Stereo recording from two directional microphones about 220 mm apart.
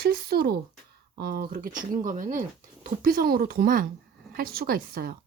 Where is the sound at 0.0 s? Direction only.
45° right (ahead or behind).